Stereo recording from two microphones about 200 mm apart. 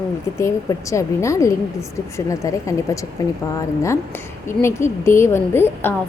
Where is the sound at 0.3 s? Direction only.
15° left (ahead or behind).